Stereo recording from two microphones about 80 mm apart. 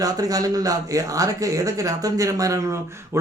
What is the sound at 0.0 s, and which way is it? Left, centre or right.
A man's voice, right.